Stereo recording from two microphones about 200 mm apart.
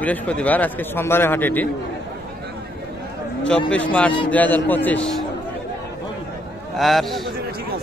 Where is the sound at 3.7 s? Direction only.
5° left (ahead or behind).